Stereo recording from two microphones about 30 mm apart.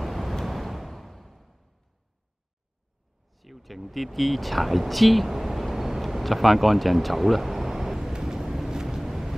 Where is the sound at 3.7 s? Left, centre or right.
Centre.